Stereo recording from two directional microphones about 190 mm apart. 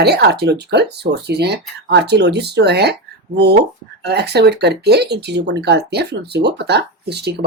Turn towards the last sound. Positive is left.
turn(degrees=-60)  # may be behind; listen again after turning